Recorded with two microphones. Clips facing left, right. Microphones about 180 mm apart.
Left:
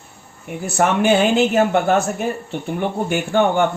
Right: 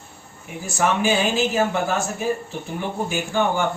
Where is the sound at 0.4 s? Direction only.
60° left (ahead or behind).